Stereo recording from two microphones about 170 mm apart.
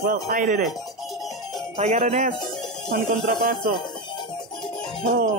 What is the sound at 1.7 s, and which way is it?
Speech, 40° right (ahead or behind).